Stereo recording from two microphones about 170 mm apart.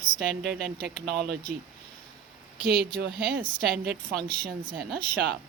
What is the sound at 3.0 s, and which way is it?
Speech, 70° right (ahead or behind).